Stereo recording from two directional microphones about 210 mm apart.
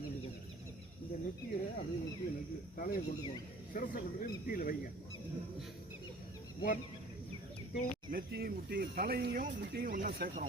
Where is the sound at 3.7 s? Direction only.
40° left (ahead or behind).